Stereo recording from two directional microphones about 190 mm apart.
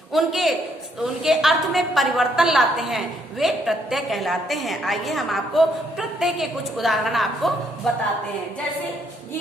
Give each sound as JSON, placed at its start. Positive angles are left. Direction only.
{"t": 0.1, "sound": "a woman's voice", "side_deg": 0}